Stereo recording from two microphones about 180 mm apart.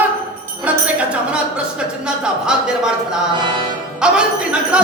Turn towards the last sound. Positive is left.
turn(degrees=-5)  # may be behind; listen again after turning